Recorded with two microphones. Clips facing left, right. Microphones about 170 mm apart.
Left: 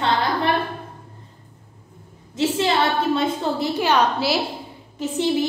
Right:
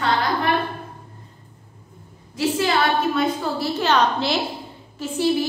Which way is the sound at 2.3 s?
25° left (ahead or behind).